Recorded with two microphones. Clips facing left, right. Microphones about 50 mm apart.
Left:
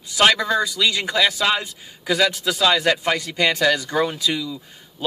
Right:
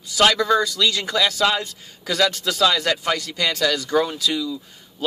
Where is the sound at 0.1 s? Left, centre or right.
Left.